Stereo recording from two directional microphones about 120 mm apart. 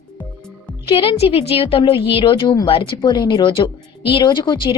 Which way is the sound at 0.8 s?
45° left (ahead or behind).